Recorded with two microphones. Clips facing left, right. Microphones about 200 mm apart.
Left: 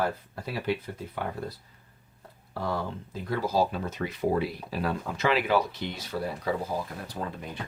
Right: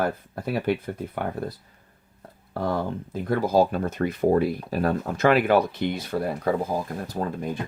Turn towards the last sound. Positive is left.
turn(degrees=-45)  # may be behind; listen again after turning